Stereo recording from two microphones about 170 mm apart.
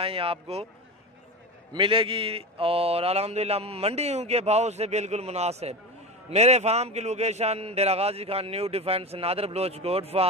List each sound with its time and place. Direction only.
0.0 s speech: 35° right (ahead or behind)
1.7 s speech: 30° right (ahead or behind)